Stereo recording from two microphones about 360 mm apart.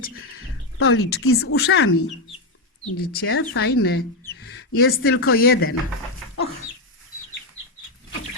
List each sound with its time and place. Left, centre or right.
0.0 s speech: left